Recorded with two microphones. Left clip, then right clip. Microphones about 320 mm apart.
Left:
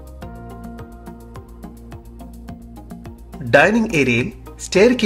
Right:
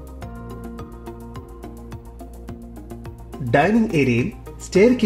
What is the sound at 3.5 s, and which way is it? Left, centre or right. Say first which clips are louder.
Speech: left 4 dB; left.